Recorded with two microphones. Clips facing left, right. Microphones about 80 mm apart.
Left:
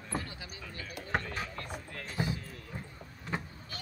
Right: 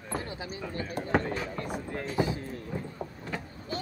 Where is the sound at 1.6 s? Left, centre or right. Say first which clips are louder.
Right 8 dB; right.